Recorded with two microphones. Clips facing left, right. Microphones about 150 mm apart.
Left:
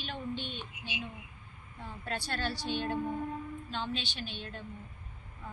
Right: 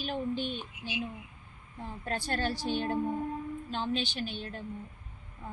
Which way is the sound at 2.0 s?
45° right (ahead or behind).